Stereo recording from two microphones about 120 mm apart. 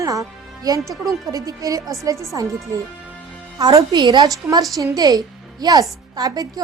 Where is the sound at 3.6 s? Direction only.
35° right (ahead or behind).